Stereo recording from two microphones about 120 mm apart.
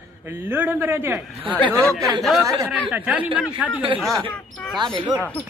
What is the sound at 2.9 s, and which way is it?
Speech, 10° right (ahead or behind).